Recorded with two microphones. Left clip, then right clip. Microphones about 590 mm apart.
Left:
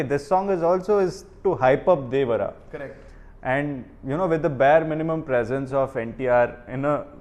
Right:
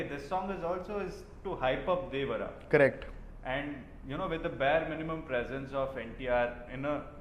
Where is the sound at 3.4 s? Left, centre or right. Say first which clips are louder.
Left 12 dB; left.